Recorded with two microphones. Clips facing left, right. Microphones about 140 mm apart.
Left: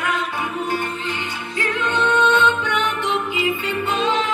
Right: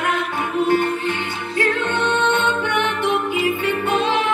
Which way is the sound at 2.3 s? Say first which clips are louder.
Left 1 dB; 50° right (ahead or behind).